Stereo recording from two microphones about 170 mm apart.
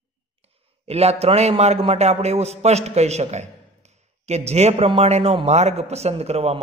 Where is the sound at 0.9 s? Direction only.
35° right (ahead or behind).